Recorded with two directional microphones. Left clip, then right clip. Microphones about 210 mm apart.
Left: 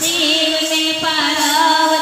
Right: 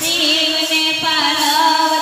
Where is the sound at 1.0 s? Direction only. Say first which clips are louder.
Right 1 dB; 45° left (ahead or behind).